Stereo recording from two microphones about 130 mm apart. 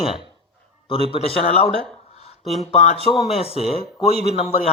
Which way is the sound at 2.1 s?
55° left (ahead or behind).